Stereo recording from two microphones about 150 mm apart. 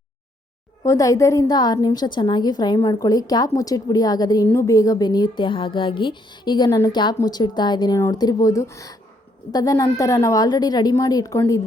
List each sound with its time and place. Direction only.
0.9 s a woman's voice: 20° left (ahead or behind)